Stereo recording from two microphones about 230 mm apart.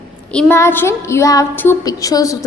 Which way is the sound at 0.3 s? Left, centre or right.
Centre.